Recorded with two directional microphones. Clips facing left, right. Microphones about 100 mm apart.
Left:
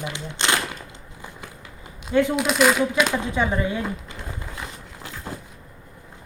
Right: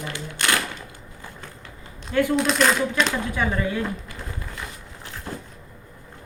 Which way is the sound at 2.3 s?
5° left (ahead or behind).